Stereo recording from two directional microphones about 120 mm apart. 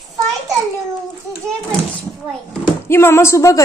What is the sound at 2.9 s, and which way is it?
Speech, 20° left (ahead or behind).